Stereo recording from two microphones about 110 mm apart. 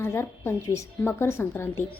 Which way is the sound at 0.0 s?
25° left (ahead or behind).